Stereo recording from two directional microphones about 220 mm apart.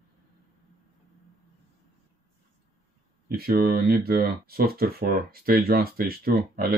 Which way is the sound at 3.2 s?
45° right (ahead or behind).